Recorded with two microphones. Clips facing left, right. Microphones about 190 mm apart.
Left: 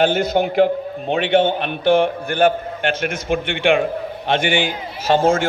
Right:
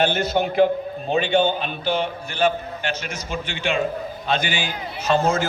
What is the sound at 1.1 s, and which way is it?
A man's voice, 75° left (ahead or behind).